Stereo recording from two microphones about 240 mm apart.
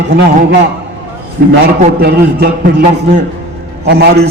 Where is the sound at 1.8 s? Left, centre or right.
Right.